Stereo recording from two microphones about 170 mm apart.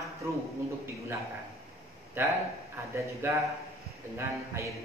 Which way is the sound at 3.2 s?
15° right (ahead or behind).